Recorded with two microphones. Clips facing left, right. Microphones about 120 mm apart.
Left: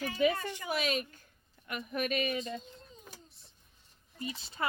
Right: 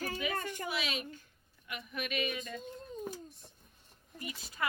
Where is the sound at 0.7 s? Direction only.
45° left (ahead or behind).